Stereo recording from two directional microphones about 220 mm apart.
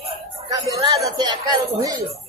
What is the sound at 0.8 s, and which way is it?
A woman's voice, 20° right (ahead or behind).